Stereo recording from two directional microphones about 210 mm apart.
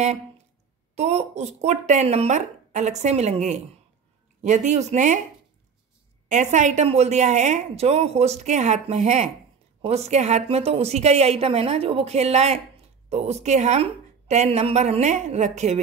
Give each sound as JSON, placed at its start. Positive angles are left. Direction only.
{"t": 0.9, "sound": "a woman's voice", "side_deg": -30}
{"t": 6.2, "sound": "a woman's voice", "side_deg": -35}